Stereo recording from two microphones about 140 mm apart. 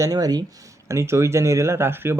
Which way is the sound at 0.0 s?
25° right (ahead or behind).